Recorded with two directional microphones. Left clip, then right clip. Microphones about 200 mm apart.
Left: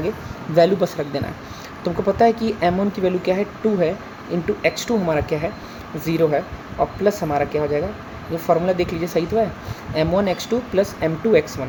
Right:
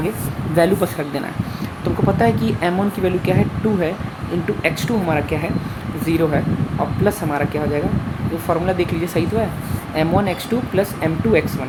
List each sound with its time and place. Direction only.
0.5 s a woman's voice: 10° left (ahead or behind)